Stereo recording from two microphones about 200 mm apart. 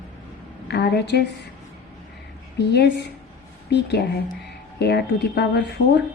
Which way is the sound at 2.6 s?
55° left (ahead or behind).